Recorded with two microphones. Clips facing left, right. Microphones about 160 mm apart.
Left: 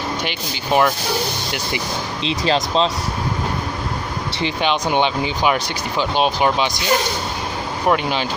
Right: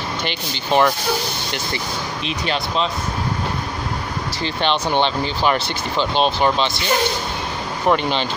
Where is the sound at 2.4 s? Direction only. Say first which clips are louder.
Left 4 dB; 30° left (ahead or behind).